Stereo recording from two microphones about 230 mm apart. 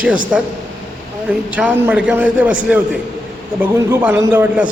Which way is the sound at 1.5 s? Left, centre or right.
Centre.